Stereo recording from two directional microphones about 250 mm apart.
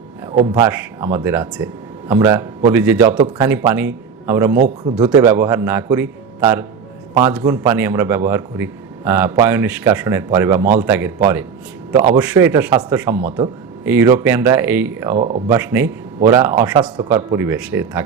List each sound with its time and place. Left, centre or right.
0.3 s speech: centre
0.7 s a man's voice: centre
4.5 s a man's voice: right
5.1 s a man's voice: centre
12.1 s a man's voice: centre